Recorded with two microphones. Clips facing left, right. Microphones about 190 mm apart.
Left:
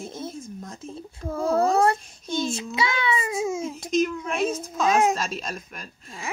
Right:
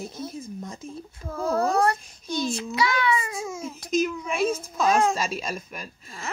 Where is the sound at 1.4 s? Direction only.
30° left (ahead or behind).